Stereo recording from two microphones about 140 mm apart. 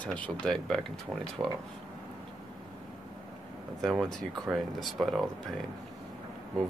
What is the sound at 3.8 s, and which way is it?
Speech, centre (ahead or behind).